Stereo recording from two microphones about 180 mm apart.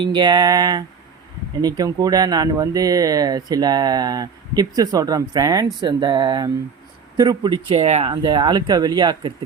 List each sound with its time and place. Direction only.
0.0 s speech: 25° right (ahead or behind)
8.1 s speech: 25° right (ahead or behind)